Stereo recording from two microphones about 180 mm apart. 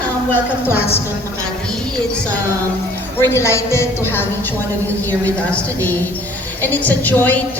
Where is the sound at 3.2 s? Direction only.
15° left (ahead or behind).